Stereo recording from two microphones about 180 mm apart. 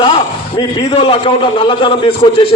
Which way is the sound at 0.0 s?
25° left (ahead or behind).